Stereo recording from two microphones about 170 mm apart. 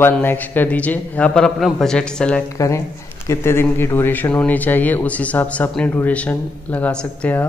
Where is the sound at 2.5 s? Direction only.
20° left (ahead or behind).